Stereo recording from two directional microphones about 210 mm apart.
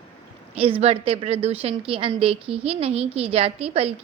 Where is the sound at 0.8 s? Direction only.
30° right (ahead or behind).